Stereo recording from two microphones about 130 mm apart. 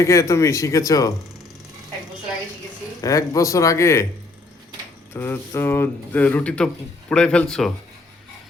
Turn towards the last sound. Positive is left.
turn(degrees=5)  # may be behind; listen again after turning